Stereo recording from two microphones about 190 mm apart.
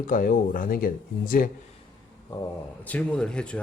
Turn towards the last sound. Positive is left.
turn(degrees=5)  # may be behind; listen again after turning